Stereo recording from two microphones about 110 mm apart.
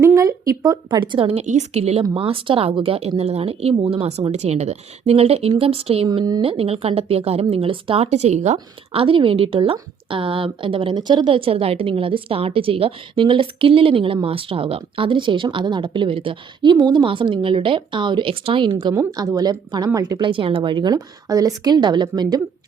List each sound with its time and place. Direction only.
0.0 s a sound: 30° right (ahead or behind)
0.9 s speech: 45° right (ahead or behind)
3.2 s speech: 70° right (ahead or behind); by 8.5 s 90° right
8.9 s a woman's voice: 55° right (ahead or behind)
19.1 s a woman's voice: 35° right (ahead or behind)
20.3 s a woman's voice: 50° right (ahead or behind)